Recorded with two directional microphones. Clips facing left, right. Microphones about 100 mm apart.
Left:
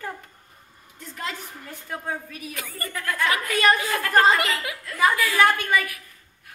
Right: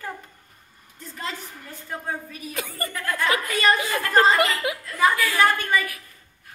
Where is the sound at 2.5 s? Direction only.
20° right (ahead or behind).